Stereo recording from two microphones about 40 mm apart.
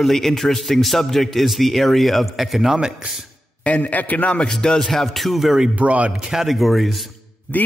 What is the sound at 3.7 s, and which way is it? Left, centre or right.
Speech, left.